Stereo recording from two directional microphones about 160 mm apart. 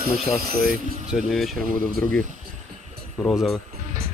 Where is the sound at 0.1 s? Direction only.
Centre (ahead or behind).